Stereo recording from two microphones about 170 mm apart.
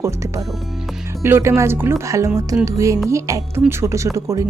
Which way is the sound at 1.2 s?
15° right (ahead or behind).